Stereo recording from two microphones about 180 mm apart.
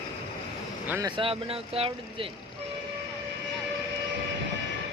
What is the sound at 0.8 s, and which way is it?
Speech, 10° right (ahead or behind).